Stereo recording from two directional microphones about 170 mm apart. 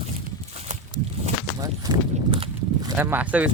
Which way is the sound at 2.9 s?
10° right (ahead or behind).